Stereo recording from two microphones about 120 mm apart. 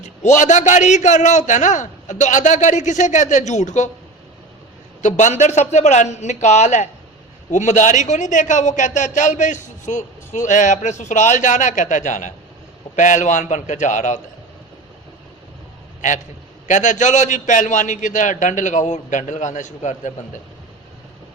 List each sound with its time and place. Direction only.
0.0 s a man's voice: 80° left
5.0 s a man's voice: 85° left
7.5 s a man's voice: 90° left
16.0 s a man's voice: 90° left